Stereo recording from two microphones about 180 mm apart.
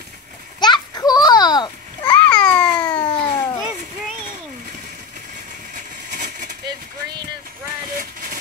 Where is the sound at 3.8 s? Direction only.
45° right (ahead or behind).